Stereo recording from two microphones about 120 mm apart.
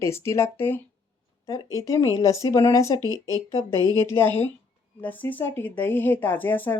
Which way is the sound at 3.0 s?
30° right (ahead or behind).